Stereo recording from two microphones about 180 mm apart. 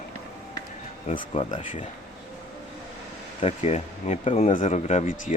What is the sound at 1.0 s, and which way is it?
Speech, 45° left (ahead or behind).